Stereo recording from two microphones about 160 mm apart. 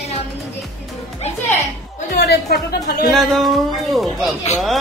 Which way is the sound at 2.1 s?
80° left.